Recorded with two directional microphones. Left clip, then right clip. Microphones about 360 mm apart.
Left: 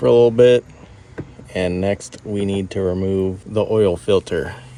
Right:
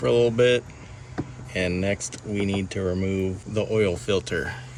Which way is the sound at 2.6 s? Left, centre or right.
Centre.